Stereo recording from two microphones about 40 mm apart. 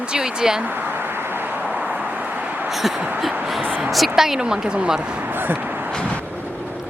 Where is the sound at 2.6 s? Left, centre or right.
Centre.